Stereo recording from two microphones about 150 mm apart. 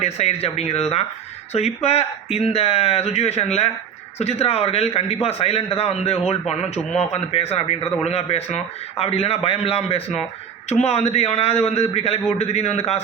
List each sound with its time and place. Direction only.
0.0 s a man's voice: 45° left (ahead or behind)